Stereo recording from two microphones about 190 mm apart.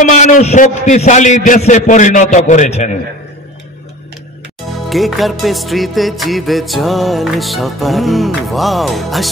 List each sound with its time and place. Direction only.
0.0 s a man's voice: 40° left (ahead or behind)
4.8 s music: centre (ahead or behind)